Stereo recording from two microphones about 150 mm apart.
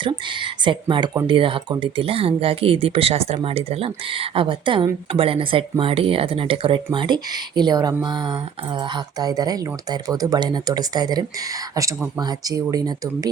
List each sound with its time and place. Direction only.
0.0 s speech: 30° right (ahead or behind)